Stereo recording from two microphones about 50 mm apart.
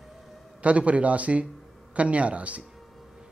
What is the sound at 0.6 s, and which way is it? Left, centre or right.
A man's voice, right.